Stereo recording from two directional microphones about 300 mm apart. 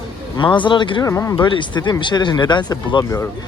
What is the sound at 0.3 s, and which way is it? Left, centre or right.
Speech, centre.